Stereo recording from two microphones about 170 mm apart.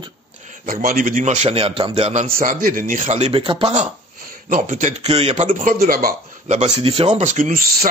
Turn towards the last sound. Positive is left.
turn(degrees=-45)  # may be behind; listen again after turning